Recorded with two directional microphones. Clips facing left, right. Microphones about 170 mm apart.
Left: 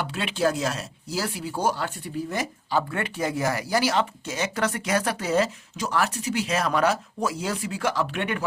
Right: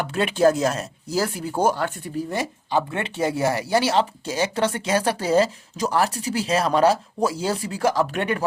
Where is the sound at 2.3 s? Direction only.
25° right (ahead or behind).